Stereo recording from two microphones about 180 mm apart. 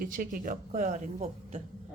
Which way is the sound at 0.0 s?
50° right (ahead or behind).